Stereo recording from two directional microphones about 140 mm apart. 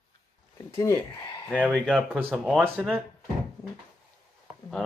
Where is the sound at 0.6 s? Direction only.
20° left (ahead or behind).